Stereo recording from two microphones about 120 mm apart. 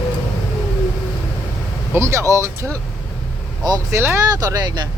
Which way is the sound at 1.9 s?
25° right (ahead or behind).